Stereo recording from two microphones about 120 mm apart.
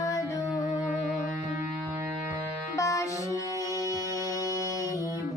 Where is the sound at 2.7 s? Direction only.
25° left (ahead or behind).